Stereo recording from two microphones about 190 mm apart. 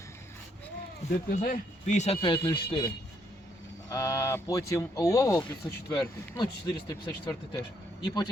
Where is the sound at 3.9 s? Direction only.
15° left (ahead or behind).